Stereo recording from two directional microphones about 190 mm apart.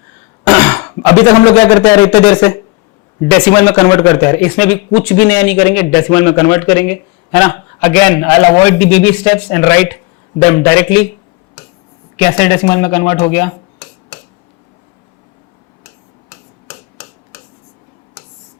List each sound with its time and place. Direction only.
0.4 s cough: 15° left (ahead or behind)
1.2 s speech: 15° left (ahead or behind)
8.8 s speech: 10° left (ahead or behind)
12.1 s speech: 10° left (ahead or behind)